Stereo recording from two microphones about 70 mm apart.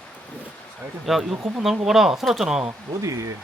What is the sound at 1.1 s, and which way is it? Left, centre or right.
Speech, centre.